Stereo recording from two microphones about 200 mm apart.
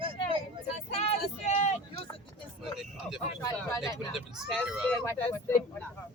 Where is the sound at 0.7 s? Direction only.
30° left (ahead or behind).